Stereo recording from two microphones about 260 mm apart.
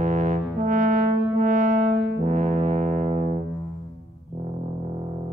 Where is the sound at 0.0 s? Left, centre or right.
Right.